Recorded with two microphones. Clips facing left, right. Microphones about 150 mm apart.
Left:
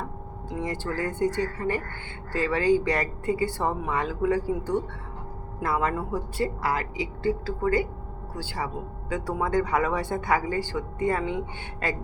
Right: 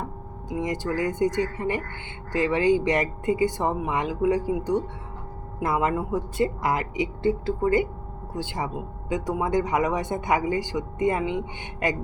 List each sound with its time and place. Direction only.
0.5 s speech: 15° right (ahead or behind)